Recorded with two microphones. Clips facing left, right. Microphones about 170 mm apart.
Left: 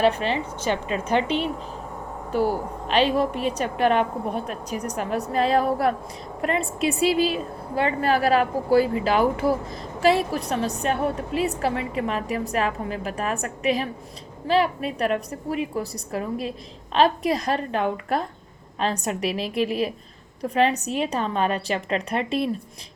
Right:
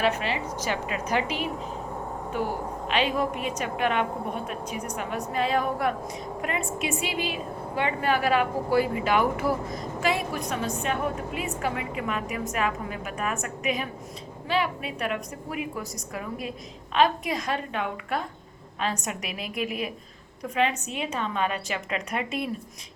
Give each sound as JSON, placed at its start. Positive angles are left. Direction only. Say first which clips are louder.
{"t": 0.0, "sound": "a woman's voice", "louder": "left 5 dB", "side_deg": 30}